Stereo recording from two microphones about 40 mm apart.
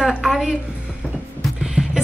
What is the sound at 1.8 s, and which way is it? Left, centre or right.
Music, right.